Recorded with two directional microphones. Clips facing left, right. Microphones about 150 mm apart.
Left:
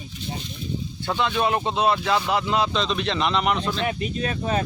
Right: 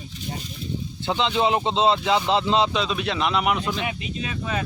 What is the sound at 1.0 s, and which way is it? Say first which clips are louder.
Speech: right 1 dB; 20° right (ahead or behind).